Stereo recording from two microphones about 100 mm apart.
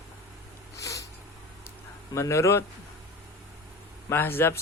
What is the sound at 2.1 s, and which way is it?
Speech, 30° left (ahead or behind).